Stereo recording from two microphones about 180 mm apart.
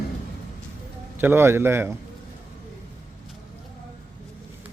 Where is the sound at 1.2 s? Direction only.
10° right (ahead or behind).